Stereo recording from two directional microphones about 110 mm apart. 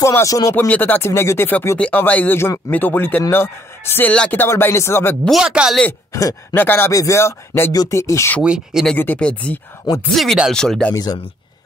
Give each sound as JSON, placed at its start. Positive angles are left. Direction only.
{"t": 0.0, "sound": "speech", "side_deg": 30}
{"t": 0.6, "sound": "speech", "side_deg": 15}
{"t": 5.4, "sound": "speech", "side_deg": -5}
{"t": 6.5, "sound": "speech", "side_deg": 20}
{"t": 8.4, "sound": "speech", "side_deg": -5}
{"t": 8.9, "sound": "speech", "side_deg": 15}
{"t": 10.1, "sound": "speech", "side_deg": 0}